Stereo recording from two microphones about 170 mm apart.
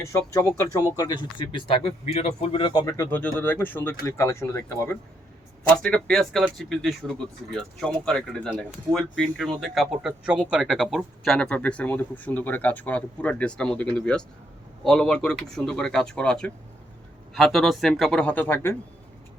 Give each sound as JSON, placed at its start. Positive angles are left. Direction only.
{"t": 0.0, "sound": "speech", "side_deg": 15}